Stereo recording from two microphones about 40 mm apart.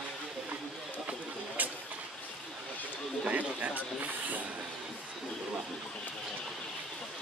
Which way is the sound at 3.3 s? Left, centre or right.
Right.